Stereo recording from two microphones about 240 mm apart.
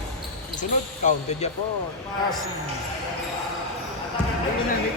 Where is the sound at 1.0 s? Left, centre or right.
Left.